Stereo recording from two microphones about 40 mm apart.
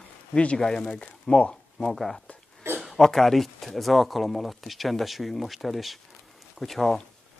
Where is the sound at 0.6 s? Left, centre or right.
Centre.